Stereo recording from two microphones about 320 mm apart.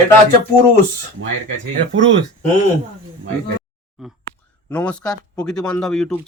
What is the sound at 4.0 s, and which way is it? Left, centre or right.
Speech, centre.